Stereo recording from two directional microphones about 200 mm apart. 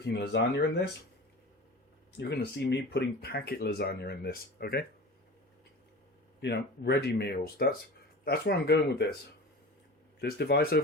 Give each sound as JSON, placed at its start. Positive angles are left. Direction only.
{"t": 0.0, "sound": "speech", "side_deg": 55}
{"t": 2.1, "sound": "speech", "side_deg": 55}
{"t": 6.4, "sound": "speech", "side_deg": 60}
{"t": 10.2, "sound": "speech", "side_deg": 55}